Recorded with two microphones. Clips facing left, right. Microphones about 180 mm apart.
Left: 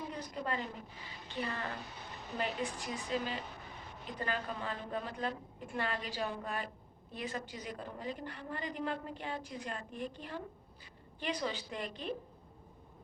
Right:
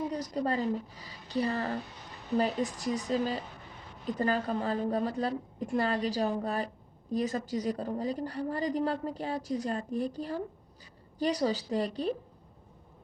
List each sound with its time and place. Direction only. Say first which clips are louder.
0.1 s a woman's voice: right 8 dB; 40° right (ahead or behind)